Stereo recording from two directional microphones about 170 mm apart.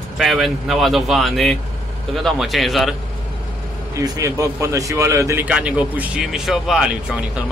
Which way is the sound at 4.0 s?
20° right (ahead or behind).